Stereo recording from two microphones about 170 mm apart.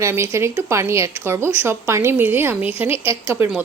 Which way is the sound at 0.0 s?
15° right (ahead or behind).